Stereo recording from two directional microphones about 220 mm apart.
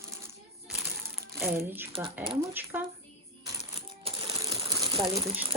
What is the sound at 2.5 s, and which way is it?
Speech, 10° right (ahead or behind).